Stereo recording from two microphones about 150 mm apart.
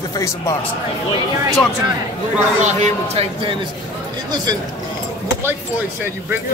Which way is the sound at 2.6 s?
50° right (ahead or behind).